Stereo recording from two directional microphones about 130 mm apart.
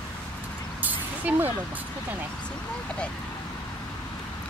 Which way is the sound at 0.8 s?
15° right (ahead or behind).